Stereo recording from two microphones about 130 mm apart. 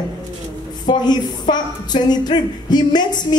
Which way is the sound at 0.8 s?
35° left (ahead or behind).